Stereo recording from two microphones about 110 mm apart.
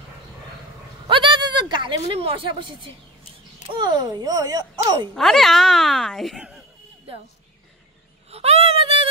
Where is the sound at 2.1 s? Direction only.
60° right (ahead or behind); by 5.1 s 35° right (ahead or behind).